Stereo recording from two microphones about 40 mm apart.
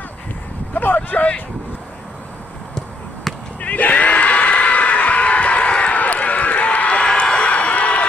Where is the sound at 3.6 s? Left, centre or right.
Left.